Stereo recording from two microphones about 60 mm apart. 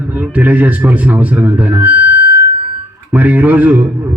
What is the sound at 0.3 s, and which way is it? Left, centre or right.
A man's voice, right.